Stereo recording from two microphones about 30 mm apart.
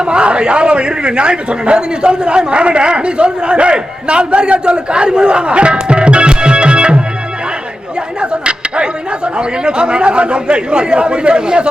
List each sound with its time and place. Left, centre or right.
0.0 s a man's voice: right
8.2 s a man's voice: right